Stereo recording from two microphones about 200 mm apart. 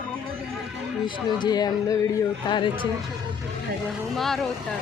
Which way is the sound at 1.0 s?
20° left (ahead or behind).